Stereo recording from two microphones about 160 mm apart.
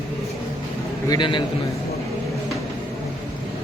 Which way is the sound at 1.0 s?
25° left (ahead or behind).